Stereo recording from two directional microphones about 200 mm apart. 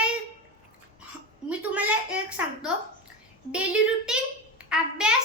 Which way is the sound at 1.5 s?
5° right (ahead or behind).